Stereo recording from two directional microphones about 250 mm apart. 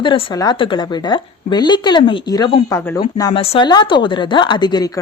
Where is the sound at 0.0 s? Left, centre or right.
Centre.